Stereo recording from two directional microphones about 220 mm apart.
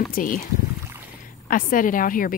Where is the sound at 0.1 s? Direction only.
40° left (ahead or behind).